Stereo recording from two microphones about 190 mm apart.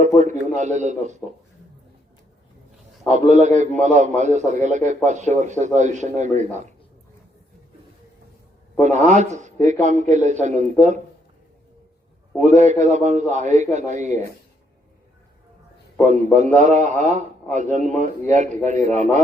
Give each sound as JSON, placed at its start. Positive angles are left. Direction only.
{"t": 0.2, "sound": "a man's voice", "side_deg": -40}
{"t": 3.1, "sound": "a man's voice", "side_deg": -40}
{"t": 8.8, "sound": "a man's voice", "side_deg": -40}
{"t": 12.5, "sound": "a man's voice", "side_deg": -40}
{"t": 16.0, "sound": "a man's voice", "side_deg": -40}